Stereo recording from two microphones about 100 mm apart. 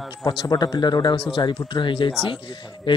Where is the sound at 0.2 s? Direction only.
45° left (ahead or behind).